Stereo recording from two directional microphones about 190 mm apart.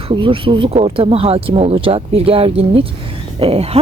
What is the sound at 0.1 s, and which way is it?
Speech, 30° right (ahead or behind).